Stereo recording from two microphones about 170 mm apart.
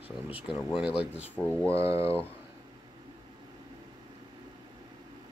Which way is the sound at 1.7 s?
15° right (ahead or behind).